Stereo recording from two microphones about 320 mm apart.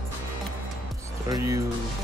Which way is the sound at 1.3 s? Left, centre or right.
Centre.